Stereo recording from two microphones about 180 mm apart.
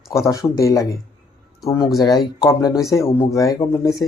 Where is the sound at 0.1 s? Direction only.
15° left (ahead or behind).